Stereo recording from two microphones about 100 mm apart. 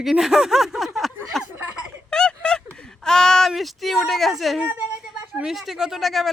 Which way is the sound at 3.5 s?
Centre (ahead or behind).